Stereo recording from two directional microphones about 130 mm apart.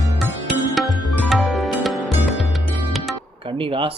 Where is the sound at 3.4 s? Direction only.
45° right (ahead or behind).